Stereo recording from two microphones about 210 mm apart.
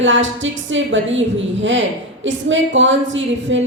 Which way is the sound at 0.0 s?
65° right (ahead or behind).